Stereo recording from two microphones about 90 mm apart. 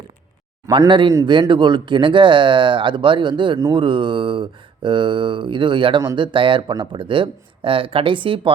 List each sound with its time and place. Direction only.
0.9 s speech: 65° right (ahead or behind)